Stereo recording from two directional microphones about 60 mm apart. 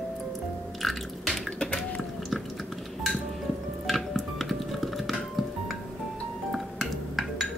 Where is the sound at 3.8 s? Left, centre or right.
Centre.